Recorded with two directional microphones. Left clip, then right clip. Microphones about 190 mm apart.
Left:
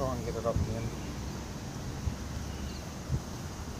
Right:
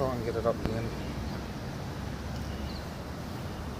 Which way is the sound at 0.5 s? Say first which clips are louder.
Right 3 dB; 10° right (ahead or behind).